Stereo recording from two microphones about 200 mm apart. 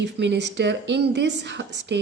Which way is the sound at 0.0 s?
60° right (ahead or behind).